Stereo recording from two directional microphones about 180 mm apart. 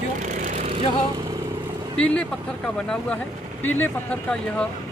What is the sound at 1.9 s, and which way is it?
Speech, 5° left (ahead or behind).